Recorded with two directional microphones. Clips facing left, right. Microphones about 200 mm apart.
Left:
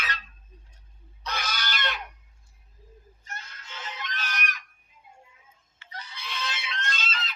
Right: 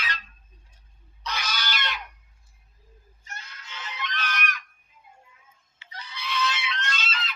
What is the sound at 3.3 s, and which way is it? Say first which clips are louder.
Fowl: even; 45° left (ahead or behind).